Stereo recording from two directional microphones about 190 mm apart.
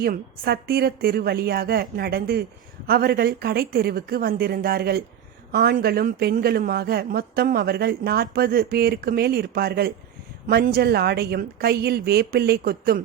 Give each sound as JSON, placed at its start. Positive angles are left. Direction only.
{"t": 0.0, "sound": "a woman's voice", "side_deg": -55}